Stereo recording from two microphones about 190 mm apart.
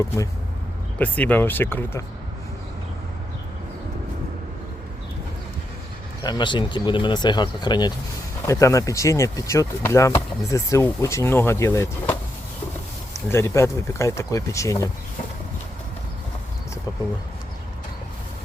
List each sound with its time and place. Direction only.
0.9 s speech: 10° left (ahead or behind)
6.2 s speech: 25° left (ahead or behind)
13.3 s speech: 15° left (ahead or behind)